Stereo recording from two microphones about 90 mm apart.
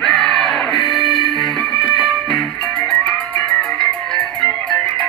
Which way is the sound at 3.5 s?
5° left (ahead or behind).